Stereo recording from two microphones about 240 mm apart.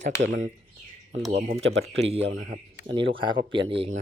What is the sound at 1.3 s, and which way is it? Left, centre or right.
Speech, right.